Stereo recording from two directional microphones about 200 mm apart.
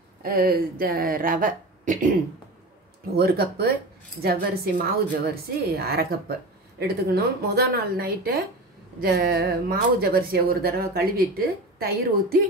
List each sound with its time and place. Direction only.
0.2 s speech: 50° right (ahead or behind)
3.2 s speech: 50° right (ahead or behind)